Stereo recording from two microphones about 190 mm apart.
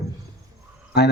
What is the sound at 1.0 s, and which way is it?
Speech, 65° left (ahead or behind).